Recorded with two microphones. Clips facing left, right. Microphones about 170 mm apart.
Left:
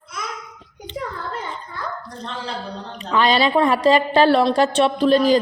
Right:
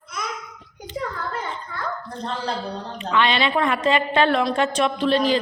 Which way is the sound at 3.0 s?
40° left (ahead or behind).